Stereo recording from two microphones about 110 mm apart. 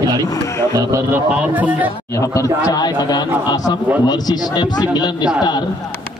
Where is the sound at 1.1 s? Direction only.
15° right (ahead or behind).